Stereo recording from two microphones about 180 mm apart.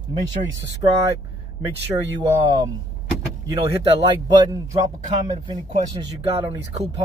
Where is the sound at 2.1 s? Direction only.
25° right (ahead or behind).